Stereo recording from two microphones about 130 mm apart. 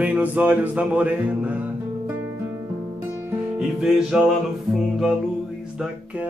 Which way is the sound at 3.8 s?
5° right (ahead or behind).